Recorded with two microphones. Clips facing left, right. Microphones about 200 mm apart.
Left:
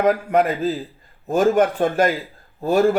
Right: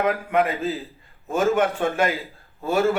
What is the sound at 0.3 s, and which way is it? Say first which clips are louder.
Speech: left 3 dB; 35° left (ahead or behind).